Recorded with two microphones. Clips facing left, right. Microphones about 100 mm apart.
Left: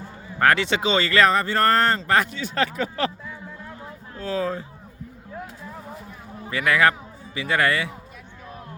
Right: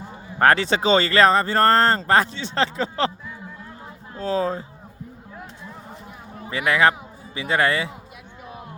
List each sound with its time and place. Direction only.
0.3 s speech: 35° right (ahead or behind)
4.1 s speech: 30° right (ahead or behind)
6.5 s speech: 25° right (ahead or behind)